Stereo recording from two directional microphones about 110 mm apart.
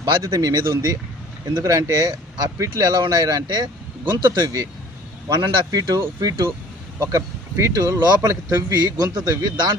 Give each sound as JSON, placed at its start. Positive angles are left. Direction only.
{"t": 0.0, "sound": "speech", "side_deg": -40}
{"t": 4.4, "sound": "speech", "side_deg": -30}